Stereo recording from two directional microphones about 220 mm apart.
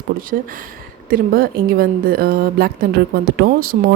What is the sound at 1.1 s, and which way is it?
A woman's voice, 40° right (ahead or behind).